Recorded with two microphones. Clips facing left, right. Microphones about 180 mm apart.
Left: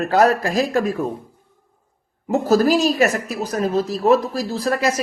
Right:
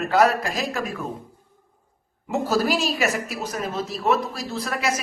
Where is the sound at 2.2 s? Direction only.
35° left (ahead or behind).